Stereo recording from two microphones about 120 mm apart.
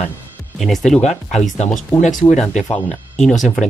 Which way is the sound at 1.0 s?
75° left (ahead or behind).